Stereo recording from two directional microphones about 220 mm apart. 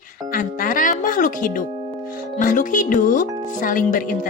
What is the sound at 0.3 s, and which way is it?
Music, 40° left (ahead or behind).